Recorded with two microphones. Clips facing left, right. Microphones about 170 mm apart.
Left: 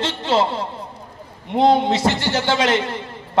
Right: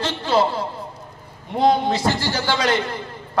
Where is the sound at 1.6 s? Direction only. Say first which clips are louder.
Left 2 dB; 25° left (ahead or behind).